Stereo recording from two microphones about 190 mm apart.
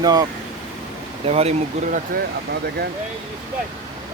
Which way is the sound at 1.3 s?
35° right (ahead or behind).